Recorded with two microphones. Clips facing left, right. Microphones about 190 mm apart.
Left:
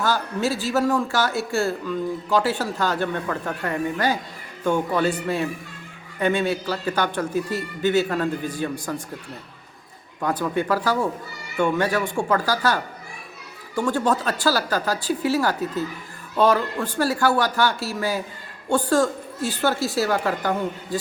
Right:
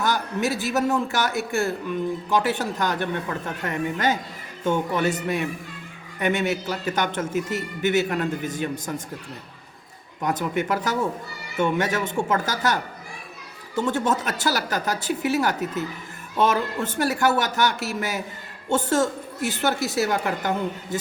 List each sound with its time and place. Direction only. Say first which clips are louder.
0.0 s speech: left 1 dB; 20° right (ahead or behind)
10.2 s speech: left 2 dB; 20° right (ahead or behind)